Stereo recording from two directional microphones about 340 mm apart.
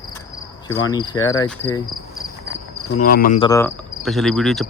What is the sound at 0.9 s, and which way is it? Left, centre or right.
Cricket, centre.